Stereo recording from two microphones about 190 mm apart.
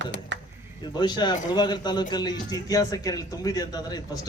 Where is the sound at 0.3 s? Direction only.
75° right (ahead or behind).